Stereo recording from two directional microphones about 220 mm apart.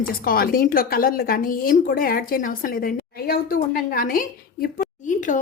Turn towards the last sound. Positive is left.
turn(degrees=35)  # may be behind; listen again after turning